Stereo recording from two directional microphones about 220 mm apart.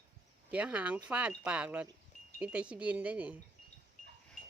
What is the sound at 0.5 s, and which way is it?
Speech, 5° right (ahead or behind).